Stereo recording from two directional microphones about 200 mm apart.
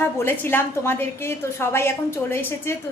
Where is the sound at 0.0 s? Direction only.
10° left (ahead or behind).